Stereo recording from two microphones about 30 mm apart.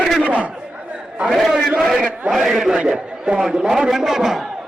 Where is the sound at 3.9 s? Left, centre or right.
Centre.